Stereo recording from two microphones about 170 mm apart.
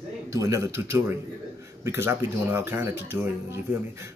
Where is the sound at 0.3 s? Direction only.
15° right (ahead or behind).